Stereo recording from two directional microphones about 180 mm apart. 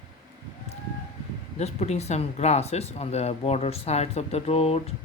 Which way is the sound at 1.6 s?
40° left (ahead or behind).